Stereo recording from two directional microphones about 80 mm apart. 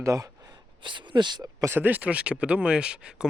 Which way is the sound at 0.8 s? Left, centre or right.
Right.